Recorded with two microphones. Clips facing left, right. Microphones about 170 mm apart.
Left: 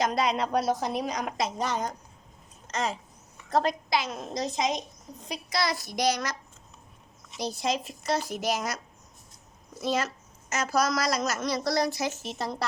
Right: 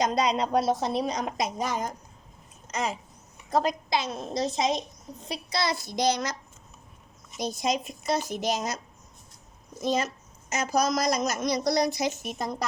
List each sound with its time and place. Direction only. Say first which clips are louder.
0.0 s a woman's voice: right 1 dB; 20° right (ahead or behind)
2.6 s a sound: even; 10° right (ahead or behind)
3.9 s a woman's voice: right 1 dB; 25° right (ahead or behind)
7.3 s a woman's voice: right 1 dB; 20° right (ahead or behind)
9.8 s a woman's voice: right 1 dB; 15° right (ahead or behind)